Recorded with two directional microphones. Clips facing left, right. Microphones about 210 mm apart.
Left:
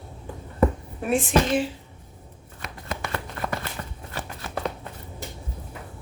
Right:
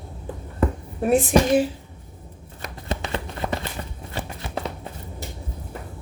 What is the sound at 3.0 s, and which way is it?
Shuffling cards, 25° right (ahead or behind).